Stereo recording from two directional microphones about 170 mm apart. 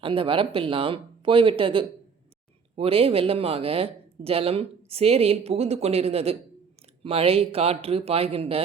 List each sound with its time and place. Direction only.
0.0 s speech: 30° right (ahead or behind)